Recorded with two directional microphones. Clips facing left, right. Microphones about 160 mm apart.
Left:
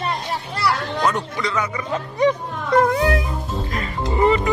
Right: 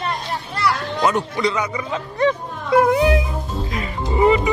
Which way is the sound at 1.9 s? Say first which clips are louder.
Left 1 dB; 10° left (ahead or behind).